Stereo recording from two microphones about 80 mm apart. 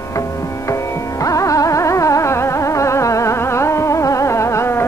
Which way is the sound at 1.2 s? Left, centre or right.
Left.